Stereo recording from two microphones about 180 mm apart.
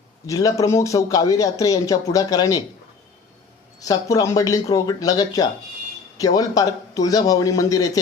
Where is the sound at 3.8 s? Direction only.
20° left (ahead or behind).